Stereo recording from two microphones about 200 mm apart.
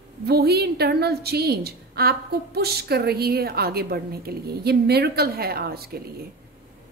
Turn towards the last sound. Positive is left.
turn(degrees=-50)  # may be behind; listen again after turning